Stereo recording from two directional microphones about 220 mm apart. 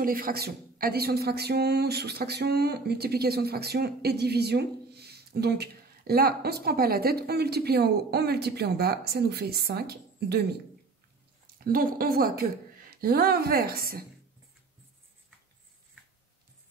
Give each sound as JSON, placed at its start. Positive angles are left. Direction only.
{"t": 0.0, "sound": "a woman's voice", "side_deg": -40}
{"t": 11.5, "sound": "a woman's voice", "side_deg": -40}